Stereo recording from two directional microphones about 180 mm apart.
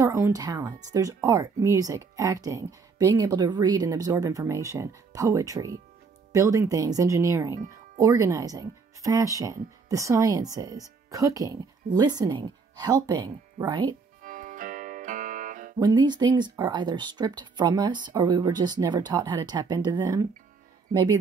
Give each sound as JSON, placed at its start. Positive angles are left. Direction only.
{"t": 0.0, "sound": "speech", "side_deg": -20}
{"t": 14.2, "sound": "music", "side_deg": -50}
{"t": 15.8, "sound": "speech", "side_deg": -25}